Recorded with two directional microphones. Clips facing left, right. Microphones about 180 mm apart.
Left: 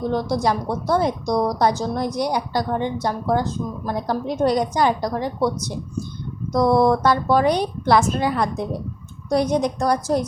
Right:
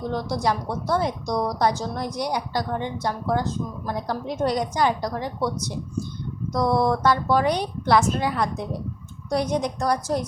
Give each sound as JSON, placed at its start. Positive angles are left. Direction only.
{"t": 0.4, "sound": "a woman's voice", "side_deg": 35}
{"t": 6.5, "sound": "a woman's voice", "side_deg": 45}